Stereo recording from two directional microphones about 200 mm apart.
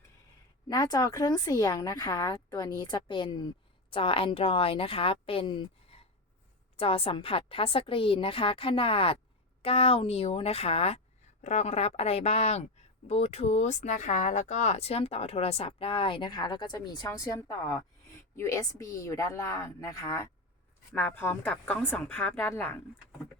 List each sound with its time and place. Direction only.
0.7 s a woman's voice: 20° left (ahead or behind)